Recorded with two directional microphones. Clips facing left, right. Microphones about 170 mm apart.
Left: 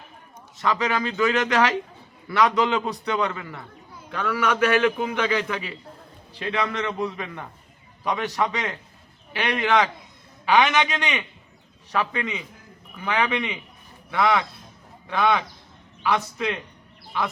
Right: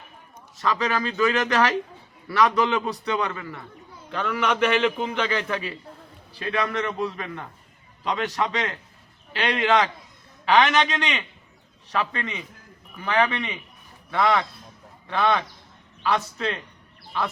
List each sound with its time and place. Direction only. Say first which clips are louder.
0.5 s a man's voice: left 1 dB; 20° left (ahead or behind)
4.8 s a man's voice: left 1 dB; 5° left (ahead or behind)